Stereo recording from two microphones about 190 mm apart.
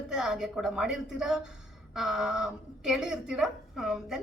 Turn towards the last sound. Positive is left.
turn(degrees=0)  # may be behind; listen again after turning